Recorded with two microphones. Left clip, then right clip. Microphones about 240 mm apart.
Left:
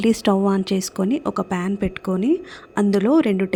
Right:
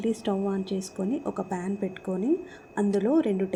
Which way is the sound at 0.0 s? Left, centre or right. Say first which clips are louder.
Left 10 dB; left.